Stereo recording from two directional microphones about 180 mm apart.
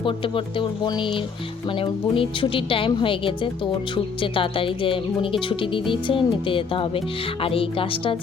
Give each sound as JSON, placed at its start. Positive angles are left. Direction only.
{"t": 0.0, "sound": "speech", "side_deg": 30}